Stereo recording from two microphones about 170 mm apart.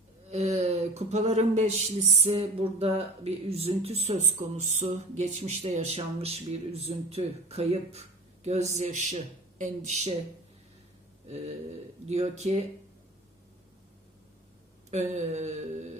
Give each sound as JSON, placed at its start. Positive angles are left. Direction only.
{"t": 0.3, "sound": "speech", "side_deg": -40}
{"t": 12.0, "sound": "speech", "side_deg": -40}
{"t": 14.8, "sound": "speech", "side_deg": -40}